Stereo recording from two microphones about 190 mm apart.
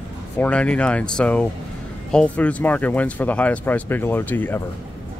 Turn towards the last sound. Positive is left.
turn(degrees=10)  # may be behind; listen again after turning